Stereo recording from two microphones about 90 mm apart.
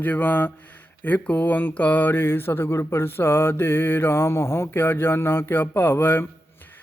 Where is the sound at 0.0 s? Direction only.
20° left (ahead or behind).